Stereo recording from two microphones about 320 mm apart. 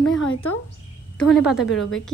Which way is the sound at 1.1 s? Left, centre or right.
Centre.